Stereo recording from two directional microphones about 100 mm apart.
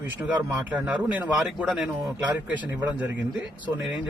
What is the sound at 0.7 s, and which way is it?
Speech, 15° right (ahead or behind).